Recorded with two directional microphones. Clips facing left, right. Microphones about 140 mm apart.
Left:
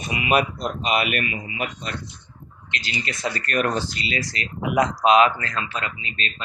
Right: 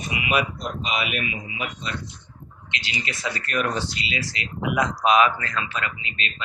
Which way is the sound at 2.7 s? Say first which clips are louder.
Left 2 dB; 40° left (ahead or behind).